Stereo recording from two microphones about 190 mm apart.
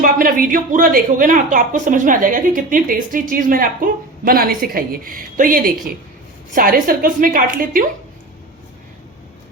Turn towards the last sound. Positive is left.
turn(degrees=-45)  # may be behind; listen again after turning